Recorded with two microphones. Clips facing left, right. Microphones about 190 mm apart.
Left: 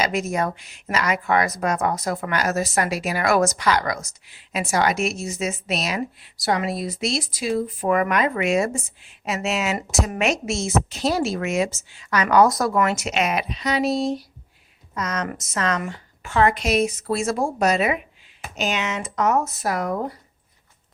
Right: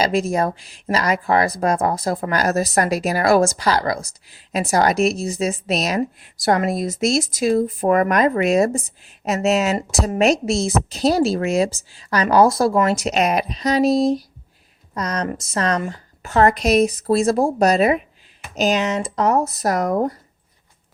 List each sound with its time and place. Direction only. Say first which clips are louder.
0.0 s speech: right 4 dB; 30° right (ahead or behind)